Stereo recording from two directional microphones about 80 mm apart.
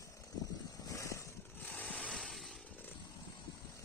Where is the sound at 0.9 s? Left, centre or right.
Left.